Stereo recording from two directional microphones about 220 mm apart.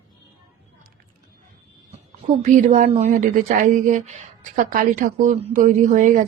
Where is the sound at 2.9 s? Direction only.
30° right (ahead or behind).